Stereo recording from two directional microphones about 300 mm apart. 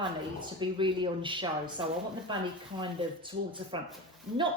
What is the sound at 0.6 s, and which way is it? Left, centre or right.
A woman's voice, centre.